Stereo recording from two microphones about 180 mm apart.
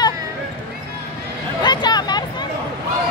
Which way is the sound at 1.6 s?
25° left (ahead or behind).